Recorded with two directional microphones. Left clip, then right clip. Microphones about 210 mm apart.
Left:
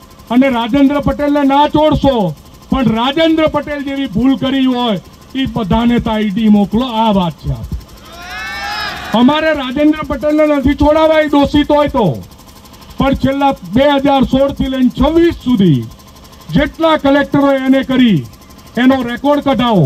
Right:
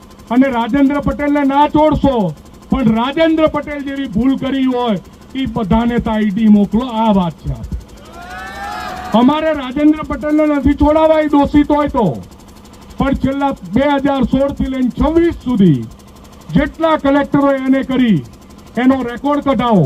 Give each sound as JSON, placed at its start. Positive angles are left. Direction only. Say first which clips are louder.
{"t": 0.3, "sound": "speech", "louder": "left 2 dB", "side_deg": 35}
{"t": 9.1, "sound": "speech", "louder": "left 1 dB", "side_deg": 35}